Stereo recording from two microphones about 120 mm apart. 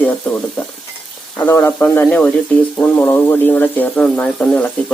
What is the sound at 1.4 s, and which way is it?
Speech, 20° left (ahead or behind).